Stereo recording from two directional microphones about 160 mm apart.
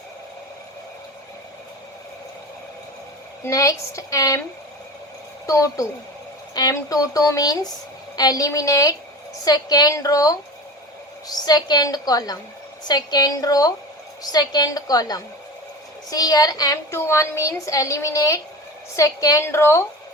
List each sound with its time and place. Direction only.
3.4 s a woman's voice: 20° left (ahead or behind)
5.5 s a woman's voice: 20° left (ahead or behind)